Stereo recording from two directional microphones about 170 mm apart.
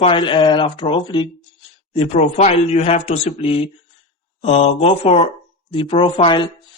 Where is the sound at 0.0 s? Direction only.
30° left (ahead or behind).